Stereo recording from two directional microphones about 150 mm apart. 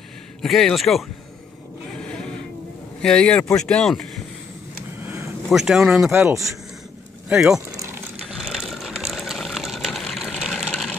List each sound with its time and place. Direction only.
0.4 s speech: centre (ahead or behind)
2.0 s a sound: 5° left (ahead or behind)
3.0 s speech: 5° left (ahead or behind)
5.5 s speech: centre (ahead or behind)
6.1 s speech: 20° right (ahead or behind)
7.2 s speech: 5° right (ahead or behind)
8.3 s ratchet: 5° right (ahead or behind)